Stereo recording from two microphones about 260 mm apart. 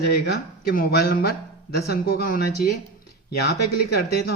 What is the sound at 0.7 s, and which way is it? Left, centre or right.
A man's voice, left.